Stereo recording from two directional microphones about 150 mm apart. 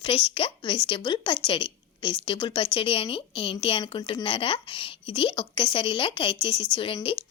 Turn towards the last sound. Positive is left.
turn(degrees=35)  # may be behind; listen again after turning